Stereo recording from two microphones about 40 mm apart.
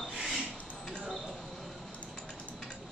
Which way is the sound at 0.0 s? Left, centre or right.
Centre.